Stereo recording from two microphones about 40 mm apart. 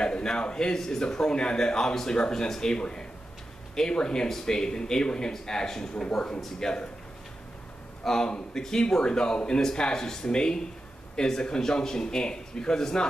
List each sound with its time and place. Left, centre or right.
0.0 s a man's voice: left
8.0 s a man's voice: centre